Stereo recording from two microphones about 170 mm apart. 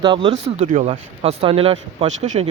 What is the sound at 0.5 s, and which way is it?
Speech, 50° right (ahead or behind).